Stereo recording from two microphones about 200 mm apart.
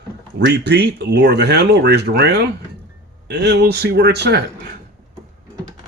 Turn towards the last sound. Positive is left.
turn(degrees=-55)  # may be behind; listen again after turning